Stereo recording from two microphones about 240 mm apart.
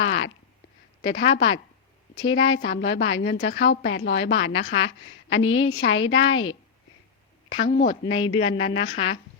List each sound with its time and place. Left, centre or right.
0.0 s a sound: left
1.0 s a woman's voice: left
8.0 s a woman's voice: left